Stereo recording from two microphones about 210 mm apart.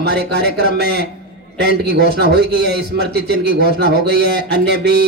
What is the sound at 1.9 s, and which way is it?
Speech, 50° right (ahead or behind).